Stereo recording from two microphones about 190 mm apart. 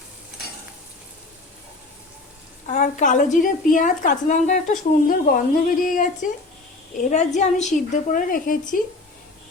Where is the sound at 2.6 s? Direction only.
40° left (ahead or behind).